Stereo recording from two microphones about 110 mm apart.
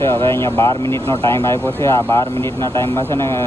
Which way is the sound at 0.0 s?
25° left (ahead or behind).